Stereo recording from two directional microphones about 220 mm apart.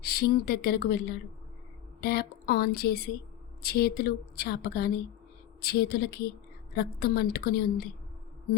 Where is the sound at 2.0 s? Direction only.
45° left (ahead or behind).